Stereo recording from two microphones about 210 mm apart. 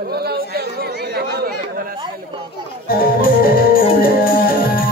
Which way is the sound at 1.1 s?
50° right (ahead or behind).